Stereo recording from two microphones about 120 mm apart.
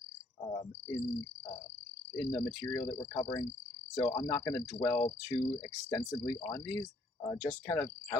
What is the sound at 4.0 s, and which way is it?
Speech, 25° left (ahead or behind).